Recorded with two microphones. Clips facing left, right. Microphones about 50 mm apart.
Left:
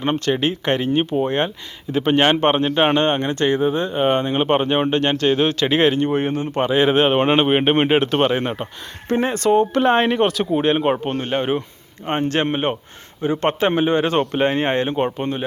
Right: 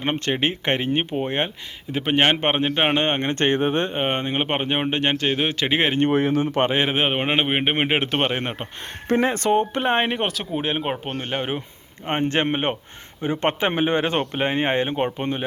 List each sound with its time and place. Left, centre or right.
0.0 s speech: right
1.9 s speech: centre; by 3.9 s right
3.9 s speech: right
6.1 s speech: right
6.8 s speech: centre
7.9 s speech: right
9.0 s speech: right
9.3 s speech: right
9.6 s speech: centre
10.3 s speech: centre
12.0 s speech: right
14.2 s speech: centre